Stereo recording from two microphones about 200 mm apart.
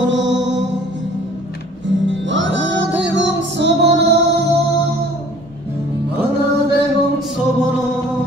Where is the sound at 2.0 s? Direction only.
65° right (ahead or behind).